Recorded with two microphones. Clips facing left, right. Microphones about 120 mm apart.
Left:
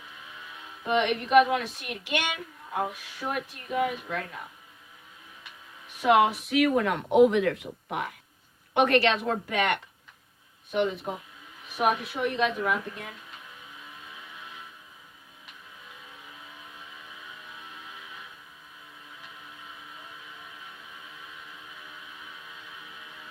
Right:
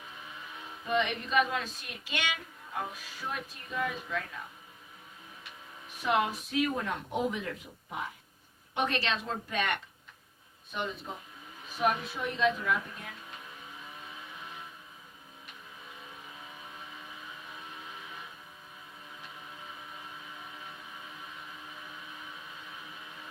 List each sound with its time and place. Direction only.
0.9 s speech: 75° left (ahead or behind)
6.0 s speech: 75° left (ahead or behind)
8.7 s speech: 65° left (ahead or behind)